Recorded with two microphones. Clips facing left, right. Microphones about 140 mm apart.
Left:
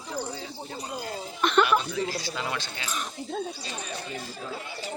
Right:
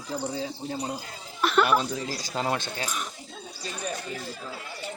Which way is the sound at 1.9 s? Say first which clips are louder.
Left 2 dB; 40° right (ahead or behind).